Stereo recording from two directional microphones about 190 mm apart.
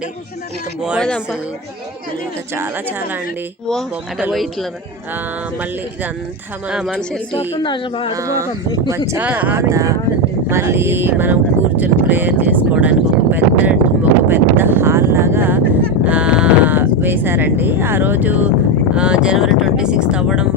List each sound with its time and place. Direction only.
0.8 s speech: centre (ahead or behind)
3.7 s speech: centre (ahead or behind)
6.7 s speech: 5° right (ahead or behind)
7.3 s speech: 30° left (ahead or behind)
8.1 s speech: 15° right (ahead or behind)